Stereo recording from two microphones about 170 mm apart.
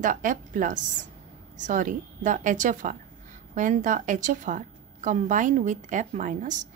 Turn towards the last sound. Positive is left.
turn(degrees=-45)  # may be behind; listen again after turning